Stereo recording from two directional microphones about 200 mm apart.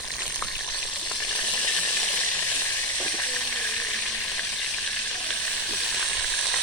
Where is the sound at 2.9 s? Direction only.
10° left (ahead or behind).